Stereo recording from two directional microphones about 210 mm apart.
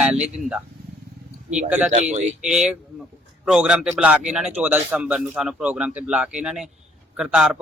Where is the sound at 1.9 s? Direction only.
35° right (ahead or behind).